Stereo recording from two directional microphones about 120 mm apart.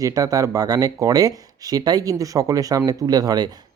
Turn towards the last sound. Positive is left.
turn(degrees=-35)  # may be behind; listen again after turning